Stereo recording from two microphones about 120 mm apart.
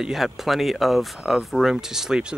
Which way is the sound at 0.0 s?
Centre (ahead or behind).